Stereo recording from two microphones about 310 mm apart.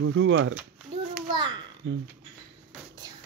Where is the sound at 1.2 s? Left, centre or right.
Centre.